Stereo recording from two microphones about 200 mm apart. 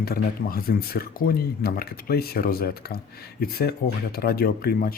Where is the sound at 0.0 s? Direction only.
50° left (ahead or behind).